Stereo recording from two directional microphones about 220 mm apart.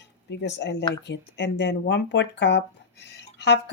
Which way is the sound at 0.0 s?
50° left (ahead or behind).